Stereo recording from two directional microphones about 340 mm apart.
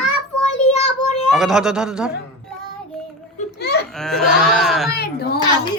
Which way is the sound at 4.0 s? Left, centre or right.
Centre.